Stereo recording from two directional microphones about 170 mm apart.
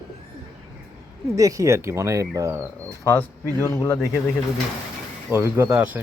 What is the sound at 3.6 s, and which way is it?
Speech, 15° left (ahead or behind).